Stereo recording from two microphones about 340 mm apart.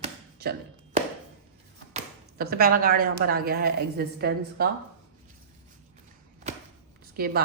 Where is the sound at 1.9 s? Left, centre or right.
Right.